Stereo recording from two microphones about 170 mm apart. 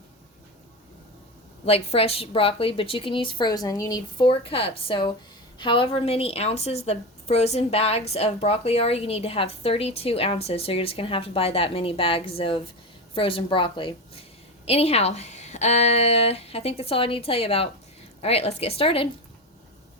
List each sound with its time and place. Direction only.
1.6 s a woman's voice: 35° left (ahead or behind)